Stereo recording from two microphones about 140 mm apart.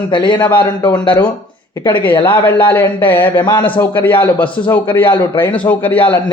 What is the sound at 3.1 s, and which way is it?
Speech, 35° left (ahead or behind).